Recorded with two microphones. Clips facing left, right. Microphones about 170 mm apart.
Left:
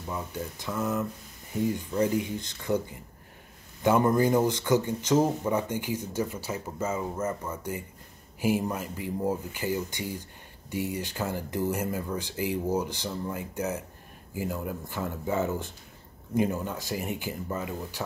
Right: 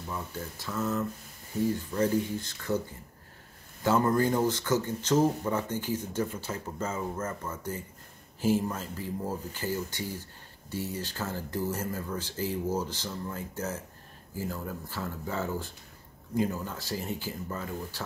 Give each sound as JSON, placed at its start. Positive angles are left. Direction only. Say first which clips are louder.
{"t": 0.1, "sound": "speech", "louder": "left 4 dB", "side_deg": 15}